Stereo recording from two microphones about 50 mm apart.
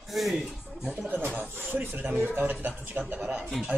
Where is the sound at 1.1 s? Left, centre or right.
Right.